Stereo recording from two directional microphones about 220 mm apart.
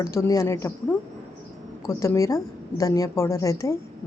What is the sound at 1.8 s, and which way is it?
A woman's voice, 15° left (ahead or behind).